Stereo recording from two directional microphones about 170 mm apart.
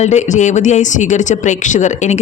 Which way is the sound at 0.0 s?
45° left (ahead or behind).